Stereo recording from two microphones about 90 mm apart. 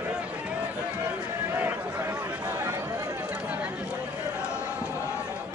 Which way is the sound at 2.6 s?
30° right (ahead or behind).